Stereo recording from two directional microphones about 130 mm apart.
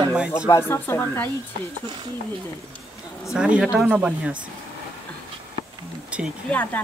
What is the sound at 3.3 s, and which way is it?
Speech, 10° right (ahead or behind).